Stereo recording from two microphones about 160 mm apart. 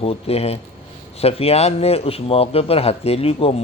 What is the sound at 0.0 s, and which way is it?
A man's voice, 40° left (ahead or behind).